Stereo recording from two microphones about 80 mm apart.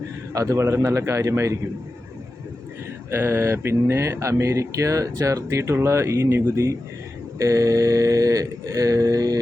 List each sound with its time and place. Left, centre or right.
0.3 s speech: right
3.1 s speech: right